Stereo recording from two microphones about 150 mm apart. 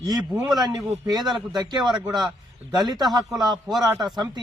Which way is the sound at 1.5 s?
30° right (ahead or behind).